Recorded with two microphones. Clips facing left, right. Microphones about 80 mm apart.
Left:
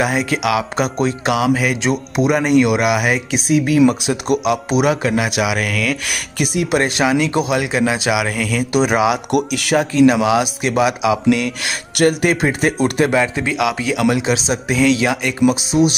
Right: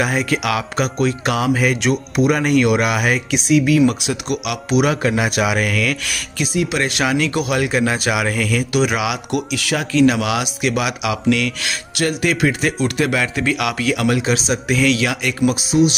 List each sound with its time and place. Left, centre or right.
0.0 s speech: centre
1.8 s speech: left
3.3 s speech: left
5.0 s a man's voice: centre
6.0 s speech: left
7.5 s speech: centre
8.7 s speech: left
9.3 s speech: left
9.8 s a man's voice: left
11.6 s speech: left
13.1 s speech: left
14.7 s a man's voice: left